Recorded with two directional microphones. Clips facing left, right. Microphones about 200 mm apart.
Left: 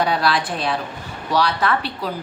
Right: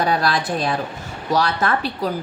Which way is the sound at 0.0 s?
45° right (ahead or behind).